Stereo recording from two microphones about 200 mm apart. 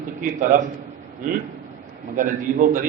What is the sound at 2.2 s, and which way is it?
Speech, 45° right (ahead or behind).